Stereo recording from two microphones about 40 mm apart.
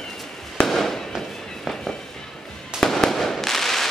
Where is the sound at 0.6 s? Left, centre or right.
Centre.